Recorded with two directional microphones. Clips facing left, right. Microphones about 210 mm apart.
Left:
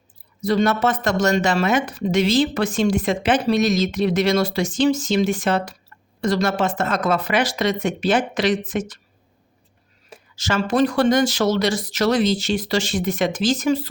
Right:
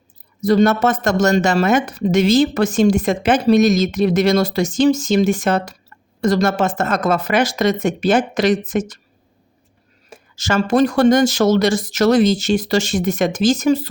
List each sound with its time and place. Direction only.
0.4 s speech: 45° right (ahead or behind)
10.1 s speech: 45° right (ahead or behind)